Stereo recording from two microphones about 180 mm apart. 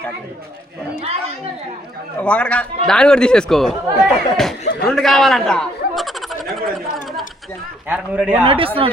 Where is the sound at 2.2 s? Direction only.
5° left (ahead or behind).